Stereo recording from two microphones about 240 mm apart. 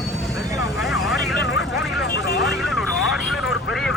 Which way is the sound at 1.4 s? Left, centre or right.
Left.